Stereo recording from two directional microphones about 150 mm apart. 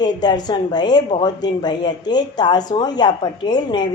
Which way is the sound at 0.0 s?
30° left (ahead or behind).